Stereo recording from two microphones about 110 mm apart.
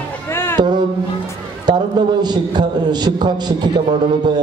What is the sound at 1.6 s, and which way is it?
A man's voice, 40° right (ahead or behind).